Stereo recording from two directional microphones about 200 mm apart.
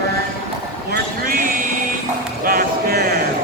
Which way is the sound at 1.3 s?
45° right (ahead or behind).